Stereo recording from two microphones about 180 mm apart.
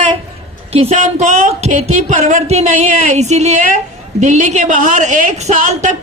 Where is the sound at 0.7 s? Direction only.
35° right (ahead or behind).